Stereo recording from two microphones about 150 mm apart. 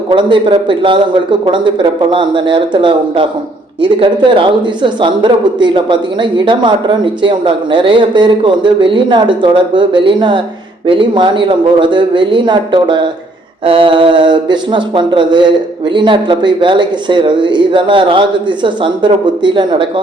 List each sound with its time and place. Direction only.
0.1 s speech: 35° right (ahead or behind)